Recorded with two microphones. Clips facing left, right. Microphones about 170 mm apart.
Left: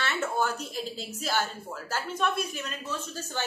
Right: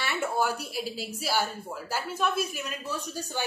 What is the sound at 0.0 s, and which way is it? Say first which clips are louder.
A woman's voice: right 1 dB; 10° right (ahead or behind).